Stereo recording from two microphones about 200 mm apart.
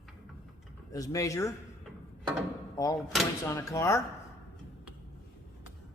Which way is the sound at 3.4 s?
15° left (ahead or behind).